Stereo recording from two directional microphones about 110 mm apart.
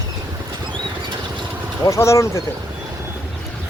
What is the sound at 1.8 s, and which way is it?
Speech, 30° left (ahead or behind).